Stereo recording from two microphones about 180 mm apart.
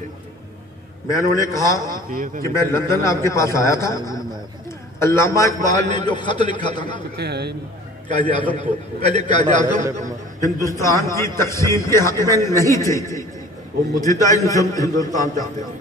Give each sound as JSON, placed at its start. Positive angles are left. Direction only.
{"t": 1.1, "sound": "a man's voice", "side_deg": 15}
{"t": 2.0, "sound": "a man's voice", "side_deg": -50}
{"t": 2.4, "sound": "a man's voice", "side_deg": 15}
{"t": 7.2, "sound": "a man's voice", "side_deg": -65}
{"t": 8.2, "sound": "a man's voice", "side_deg": 25}
{"t": 8.5, "sound": "a man's voice", "side_deg": -40}
{"t": 10.6, "sound": "a man's voice", "side_deg": 15}